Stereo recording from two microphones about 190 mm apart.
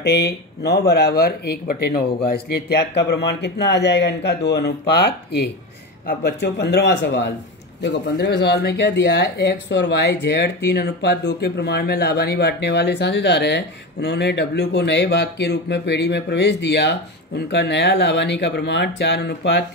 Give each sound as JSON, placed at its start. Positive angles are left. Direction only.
{"t": 0.0, "sound": "speech", "side_deg": 60}